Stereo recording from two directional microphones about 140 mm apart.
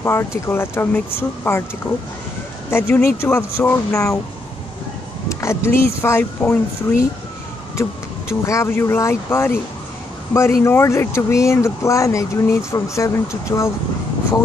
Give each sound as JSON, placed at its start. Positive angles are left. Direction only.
{"t": 0.0, "sound": "speech", "side_deg": 20}
{"t": 2.7, "sound": "speech", "side_deg": 15}
{"t": 5.3, "sound": "speech", "side_deg": 20}
{"t": 8.3, "sound": "speech", "side_deg": 20}
{"t": 10.6, "sound": "speech", "side_deg": 20}